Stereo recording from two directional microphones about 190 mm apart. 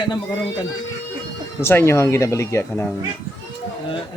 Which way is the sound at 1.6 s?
15° left (ahead or behind).